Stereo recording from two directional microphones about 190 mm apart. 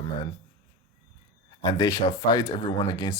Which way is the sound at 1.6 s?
20° left (ahead or behind).